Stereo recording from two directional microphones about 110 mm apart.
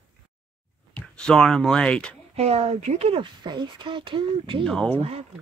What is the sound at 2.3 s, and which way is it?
Speech, 70° right (ahead or behind).